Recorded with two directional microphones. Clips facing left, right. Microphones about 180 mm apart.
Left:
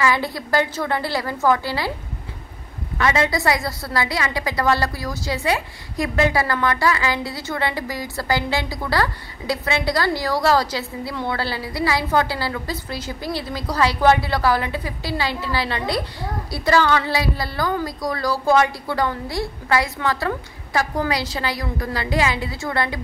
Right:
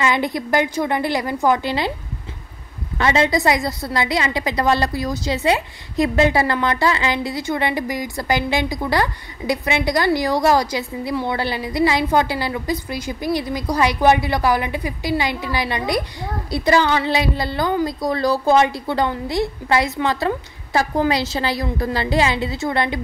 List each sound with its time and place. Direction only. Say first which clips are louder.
0.0 s a woman's voice: right 1 dB; 20° right (ahead or behind)
3.0 s a woman's voice: right 3 dB; 25° right (ahead or behind)